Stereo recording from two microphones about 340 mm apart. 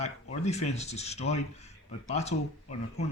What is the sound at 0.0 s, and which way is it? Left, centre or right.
Speech, centre.